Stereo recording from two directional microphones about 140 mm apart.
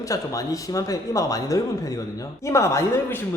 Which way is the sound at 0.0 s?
25° left (ahead or behind).